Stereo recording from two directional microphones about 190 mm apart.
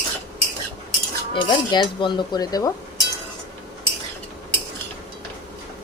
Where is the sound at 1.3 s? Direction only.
25° left (ahead or behind).